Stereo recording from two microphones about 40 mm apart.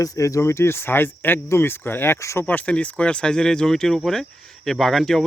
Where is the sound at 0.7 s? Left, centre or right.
Left.